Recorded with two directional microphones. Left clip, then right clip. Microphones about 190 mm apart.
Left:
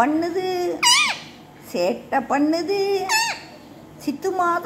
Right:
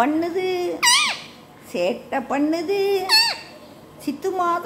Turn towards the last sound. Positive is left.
turn(degrees=-10)  # may be behind; listen again after turning